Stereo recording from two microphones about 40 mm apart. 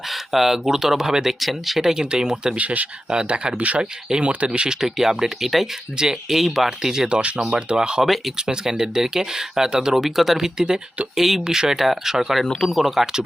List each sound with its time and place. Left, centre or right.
0.1 s speech: centre
2.6 s speech: right
3.1 s speech: right
4.8 s speech: centre
7.1 s speech: right
10.0 s speech: centre
10.3 s speech: centre
11.2 s speech: centre
11.4 s speech: centre
12.5 s speech: centre
12.7 s speech: centre